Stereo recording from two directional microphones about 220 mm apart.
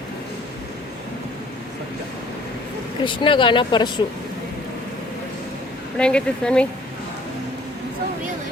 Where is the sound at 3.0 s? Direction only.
20° left (ahead or behind).